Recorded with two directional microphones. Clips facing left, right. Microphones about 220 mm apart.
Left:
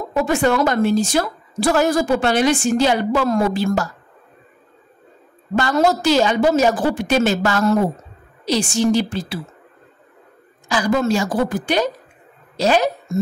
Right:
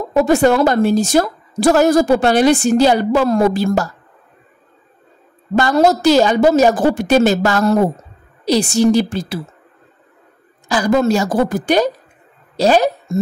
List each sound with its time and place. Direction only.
0.1 s a woman's voice: 40° right (ahead or behind)
5.6 s a woman's voice: 40° right (ahead or behind)
10.7 s a woman's voice: 40° right (ahead or behind)